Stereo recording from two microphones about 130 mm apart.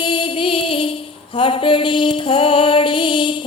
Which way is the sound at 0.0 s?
40° left (ahead or behind).